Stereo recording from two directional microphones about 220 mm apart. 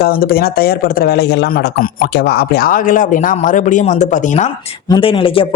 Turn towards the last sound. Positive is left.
turn(degrees=25)  # may be behind; listen again after turning